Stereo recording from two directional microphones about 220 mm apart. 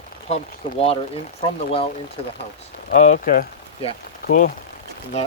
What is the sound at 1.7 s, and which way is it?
Speech, 25° left (ahead or behind).